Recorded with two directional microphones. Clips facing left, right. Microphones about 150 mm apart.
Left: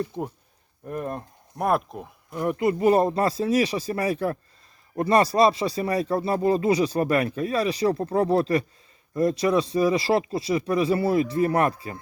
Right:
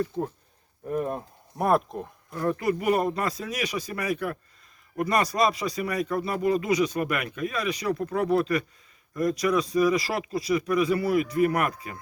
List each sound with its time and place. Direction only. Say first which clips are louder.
0.0 s speech: right 1 dB; 15° left (ahead or behind)
0.9 s speech: right 2 dB; centre (ahead or behind)
2.3 s speech: left 2 dB; 20° left (ahead or behind)